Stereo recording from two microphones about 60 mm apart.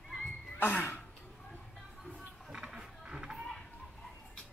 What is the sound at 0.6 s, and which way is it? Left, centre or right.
Speech, left.